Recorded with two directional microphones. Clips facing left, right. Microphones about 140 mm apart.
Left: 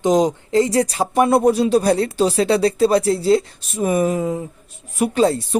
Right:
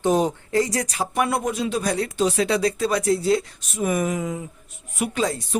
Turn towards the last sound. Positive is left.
turn(degrees=30)  # may be behind; listen again after turning